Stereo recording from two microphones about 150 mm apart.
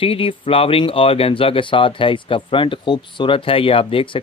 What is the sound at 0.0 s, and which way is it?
Speech, 35° left (ahead or behind).